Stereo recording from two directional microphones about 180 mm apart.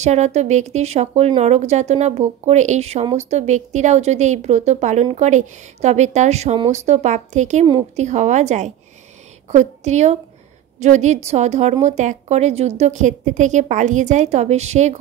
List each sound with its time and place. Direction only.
0.0 s speech: 40° right (ahead or behind)